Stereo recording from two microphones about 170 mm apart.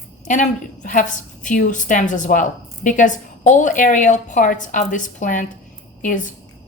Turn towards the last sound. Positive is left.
turn(degrees=50)  # may be behind; listen again after turning